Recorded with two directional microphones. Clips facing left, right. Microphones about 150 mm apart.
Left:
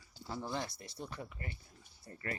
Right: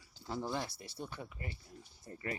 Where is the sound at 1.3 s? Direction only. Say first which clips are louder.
Right 1 dB; 15° right (ahead or behind).